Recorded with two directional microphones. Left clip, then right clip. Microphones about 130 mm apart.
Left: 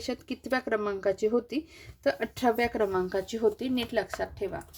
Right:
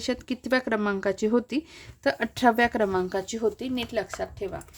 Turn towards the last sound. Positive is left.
turn(degrees=5)  # may be behind; listen again after turning